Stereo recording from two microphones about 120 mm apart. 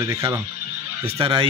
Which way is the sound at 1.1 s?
45° right (ahead or behind).